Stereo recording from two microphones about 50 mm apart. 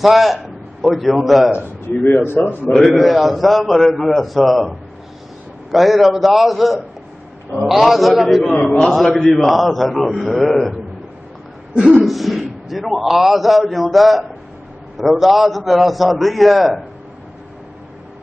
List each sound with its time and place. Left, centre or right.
0.0 s a man's voice: centre
2.0 s a man's voice: left
2.7 s a man's voice: centre
3.0 s a man's voice: centre
11.7 s speech: centre
12.0 s a man's voice: centre